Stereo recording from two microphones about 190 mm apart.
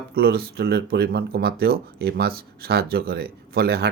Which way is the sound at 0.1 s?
55° right (ahead or behind).